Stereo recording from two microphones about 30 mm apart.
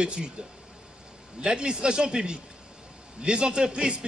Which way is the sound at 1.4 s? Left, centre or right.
Right.